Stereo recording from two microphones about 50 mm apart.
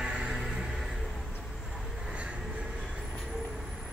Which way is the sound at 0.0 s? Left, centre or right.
Centre.